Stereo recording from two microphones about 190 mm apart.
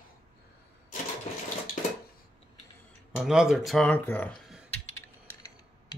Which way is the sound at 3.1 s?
Centre (ahead or behind).